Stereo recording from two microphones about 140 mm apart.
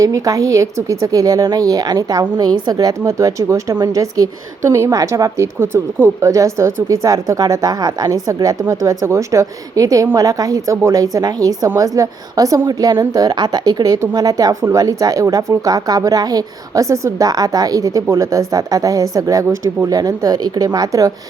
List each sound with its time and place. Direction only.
0.0 s speech: 25° right (ahead or behind)